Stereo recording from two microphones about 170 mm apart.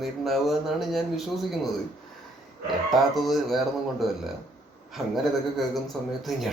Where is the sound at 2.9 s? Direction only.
Centre (ahead or behind).